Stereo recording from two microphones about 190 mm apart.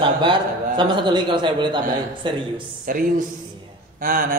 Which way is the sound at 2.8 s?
45° right (ahead or behind).